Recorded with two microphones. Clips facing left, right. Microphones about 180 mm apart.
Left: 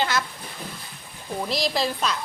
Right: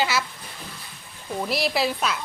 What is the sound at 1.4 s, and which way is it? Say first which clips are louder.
Speech: right 1 dB; 5° right (ahead or behind).